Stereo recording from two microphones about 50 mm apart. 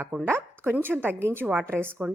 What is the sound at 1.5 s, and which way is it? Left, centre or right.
Speech, right.